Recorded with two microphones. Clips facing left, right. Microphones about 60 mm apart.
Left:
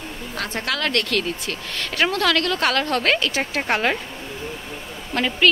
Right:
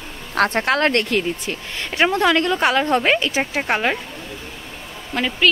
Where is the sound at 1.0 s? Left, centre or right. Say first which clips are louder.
Right 3 dB; centre.